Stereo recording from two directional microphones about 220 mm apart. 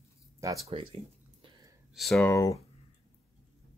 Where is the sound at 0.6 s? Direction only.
25° right (ahead or behind).